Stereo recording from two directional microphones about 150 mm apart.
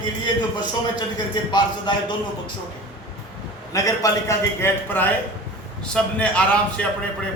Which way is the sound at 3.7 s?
25° left (ahead or behind).